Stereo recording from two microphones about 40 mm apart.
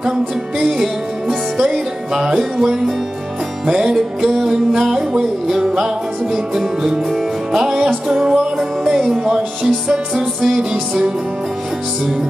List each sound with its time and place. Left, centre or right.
0.6 s music: centre